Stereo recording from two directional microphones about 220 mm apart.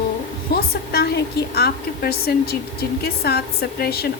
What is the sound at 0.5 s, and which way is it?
A woman's voice, 45° left (ahead or behind).